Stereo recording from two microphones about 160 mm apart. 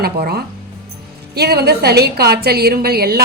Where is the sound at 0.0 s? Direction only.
80° right.